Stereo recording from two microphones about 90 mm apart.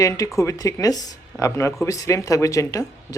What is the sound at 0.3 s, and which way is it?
Speech, 40° left (ahead or behind).